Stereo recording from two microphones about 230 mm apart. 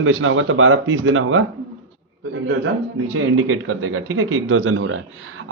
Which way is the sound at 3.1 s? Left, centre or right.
Right.